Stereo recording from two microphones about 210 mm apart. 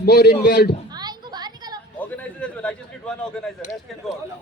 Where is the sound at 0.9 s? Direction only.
20° right (ahead or behind).